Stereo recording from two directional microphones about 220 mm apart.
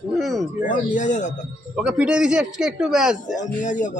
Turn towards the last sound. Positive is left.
turn(degrees=35)  # may be behind; listen again after turning